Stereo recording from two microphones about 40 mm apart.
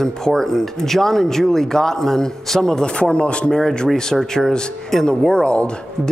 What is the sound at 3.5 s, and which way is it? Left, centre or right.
A man's voice, centre.